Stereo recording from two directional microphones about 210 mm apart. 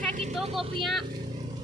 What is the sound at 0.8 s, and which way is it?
Speech, centre (ahead or behind).